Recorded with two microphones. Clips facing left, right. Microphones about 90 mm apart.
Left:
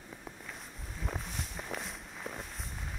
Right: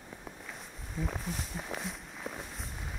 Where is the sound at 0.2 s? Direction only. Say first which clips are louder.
Right 1 dB; centre (ahead or behind).